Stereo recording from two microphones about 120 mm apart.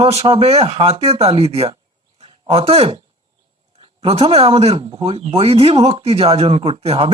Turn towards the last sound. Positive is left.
turn(degrees=-55)  # may be behind; listen again after turning